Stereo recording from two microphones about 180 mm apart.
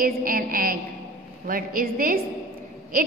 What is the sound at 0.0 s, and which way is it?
A woman's voice, 50° right (ahead or behind).